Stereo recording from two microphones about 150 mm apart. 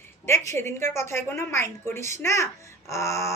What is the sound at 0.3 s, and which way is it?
A woman's voice, 15° left (ahead or behind).